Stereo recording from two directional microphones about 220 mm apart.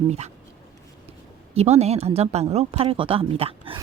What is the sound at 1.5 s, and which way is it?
Speech, 30° right (ahead or behind).